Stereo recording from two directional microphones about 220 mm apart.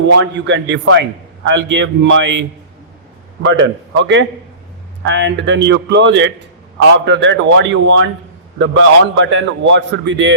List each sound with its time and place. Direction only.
0.1 s a man's voice: 55° right (ahead or behind)